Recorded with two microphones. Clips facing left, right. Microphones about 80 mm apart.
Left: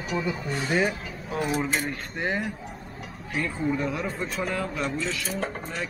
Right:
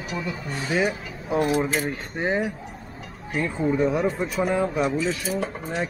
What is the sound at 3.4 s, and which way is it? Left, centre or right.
Speech, centre.